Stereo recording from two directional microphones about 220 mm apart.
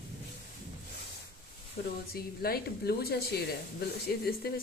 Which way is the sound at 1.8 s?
45° left (ahead or behind).